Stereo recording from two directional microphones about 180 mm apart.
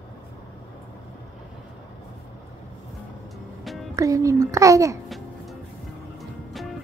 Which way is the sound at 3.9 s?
20° right (ahead or behind).